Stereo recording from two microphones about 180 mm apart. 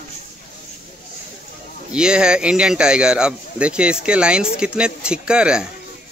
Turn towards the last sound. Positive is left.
turn(degrees=-5)  # may be behind; listen again after turning